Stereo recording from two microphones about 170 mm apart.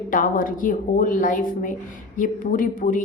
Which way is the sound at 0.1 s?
55° left (ahead or behind).